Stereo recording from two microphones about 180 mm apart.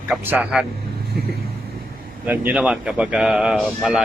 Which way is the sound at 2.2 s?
10° right (ahead or behind).